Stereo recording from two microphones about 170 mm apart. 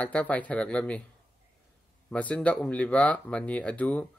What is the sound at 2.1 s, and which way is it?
Speech, 5° left (ahead or behind).